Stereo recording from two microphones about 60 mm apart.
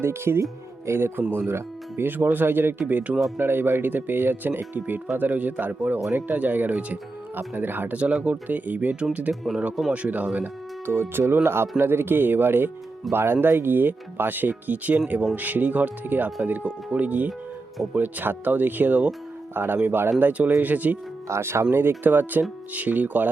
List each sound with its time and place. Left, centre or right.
0.0 s speech: right
3.3 s speech: right
9.3 s speech: centre
9.9 s speech: right
10.8 s speech: right
19.5 s speech: right
21.2 s speech: right
21.7 s speech: right